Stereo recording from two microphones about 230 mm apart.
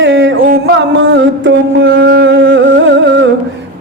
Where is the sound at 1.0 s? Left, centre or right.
Right.